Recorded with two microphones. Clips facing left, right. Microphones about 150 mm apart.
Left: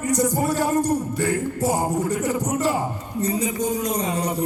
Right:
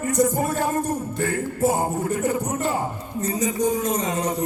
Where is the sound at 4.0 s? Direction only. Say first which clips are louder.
Even; 30° left (ahead or behind).